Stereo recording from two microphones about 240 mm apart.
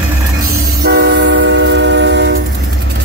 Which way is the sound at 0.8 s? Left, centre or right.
Right.